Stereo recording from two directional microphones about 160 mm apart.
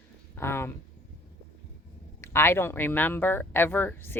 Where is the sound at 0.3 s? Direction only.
15° left (ahead or behind).